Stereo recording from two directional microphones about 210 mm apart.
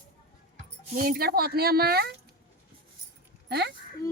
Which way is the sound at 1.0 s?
45° right (ahead or behind).